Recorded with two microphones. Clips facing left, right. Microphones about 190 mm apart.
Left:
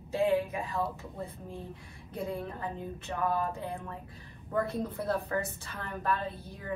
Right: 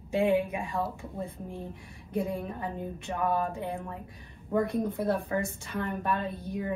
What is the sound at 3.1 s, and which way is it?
Speech, 20° right (ahead or behind).